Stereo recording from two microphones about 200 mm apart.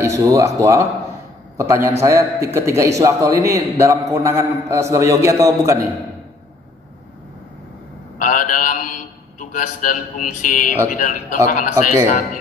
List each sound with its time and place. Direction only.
0.0 s a man's voice: 15° right (ahead or behind)
8.2 s a sound: 40° left (ahead or behind)
9.4 s a man's voice: 40° left (ahead or behind)